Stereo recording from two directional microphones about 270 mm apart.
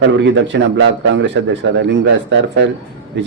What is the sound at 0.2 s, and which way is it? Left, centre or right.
A man's voice, right.